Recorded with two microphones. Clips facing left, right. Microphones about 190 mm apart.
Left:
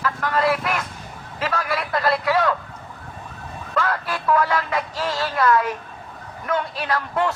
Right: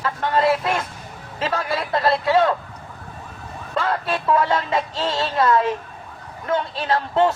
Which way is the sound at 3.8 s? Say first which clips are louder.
Right 2 dB; 25° right (ahead or behind).